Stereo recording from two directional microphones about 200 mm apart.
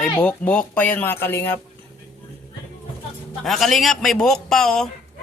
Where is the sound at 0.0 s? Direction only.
10° left (ahead or behind).